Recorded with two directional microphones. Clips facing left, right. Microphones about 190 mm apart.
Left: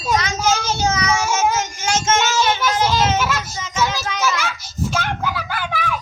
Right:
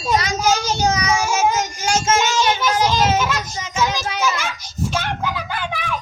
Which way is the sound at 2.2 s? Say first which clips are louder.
Even; 15° right (ahead or behind).